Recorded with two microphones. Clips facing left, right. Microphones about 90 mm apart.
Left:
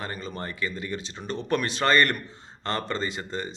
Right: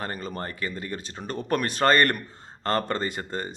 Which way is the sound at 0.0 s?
45° right (ahead or behind).